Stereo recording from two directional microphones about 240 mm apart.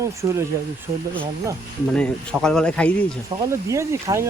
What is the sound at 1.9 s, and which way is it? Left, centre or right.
Speech, centre.